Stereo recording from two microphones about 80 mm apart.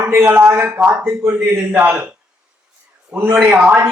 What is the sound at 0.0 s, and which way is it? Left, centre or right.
A man's voice, right.